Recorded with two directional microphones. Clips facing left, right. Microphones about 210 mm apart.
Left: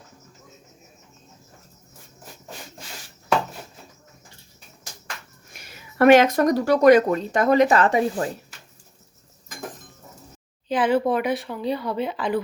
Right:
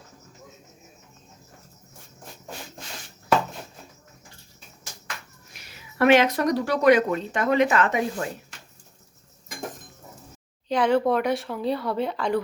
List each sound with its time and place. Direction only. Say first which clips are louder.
5.5 s a woman's voice: left 3 dB; 45° left (ahead or behind)
10.7 s speech: even; 5° left (ahead or behind)